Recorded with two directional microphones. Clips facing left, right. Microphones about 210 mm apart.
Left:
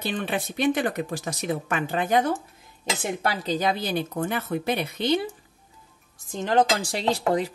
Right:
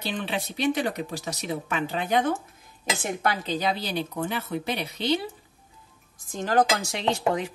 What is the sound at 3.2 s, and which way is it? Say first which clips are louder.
Speech: left 1 dB; 30° left (ahead or behind).